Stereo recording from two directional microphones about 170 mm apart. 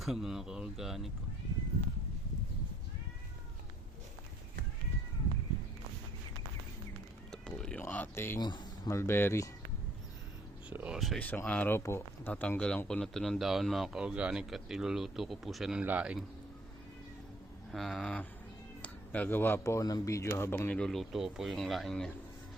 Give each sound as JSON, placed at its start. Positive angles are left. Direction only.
{"t": 0.0, "sound": "speech", "side_deg": 0}
{"t": 7.3, "sound": "cat", "side_deg": 5}
{"t": 8.4, "sound": "speech", "side_deg": 25}
{"t": 10.7, "sound": "speech", "side_deg": -5}
{"t": 17.7, "sound": "speech", "side_deg": 0}